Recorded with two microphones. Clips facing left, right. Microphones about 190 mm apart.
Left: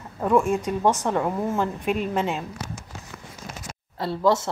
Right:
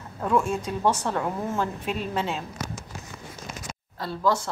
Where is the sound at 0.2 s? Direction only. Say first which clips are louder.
Left 4 dB; 15° left (ahead or behind).